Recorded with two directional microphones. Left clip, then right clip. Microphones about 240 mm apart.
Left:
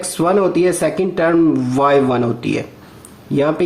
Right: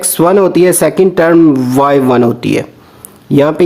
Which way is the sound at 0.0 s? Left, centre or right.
Right.